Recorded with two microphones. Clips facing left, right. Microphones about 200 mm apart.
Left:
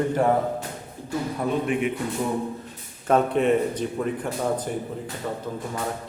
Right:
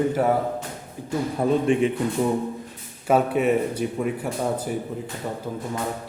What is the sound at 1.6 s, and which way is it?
Speech, 30° right (ahead or behind).